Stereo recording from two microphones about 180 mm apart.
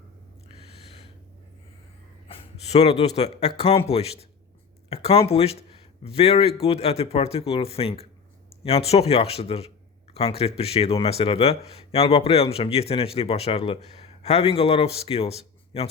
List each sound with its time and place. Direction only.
2.3 s a man's voice: 35° left (ahead or behind)